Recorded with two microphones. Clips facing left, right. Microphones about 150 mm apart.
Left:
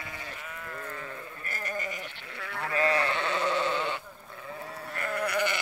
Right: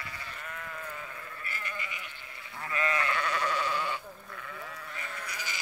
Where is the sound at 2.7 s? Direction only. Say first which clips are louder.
Left 4 dB; 35° left (ahead or behind).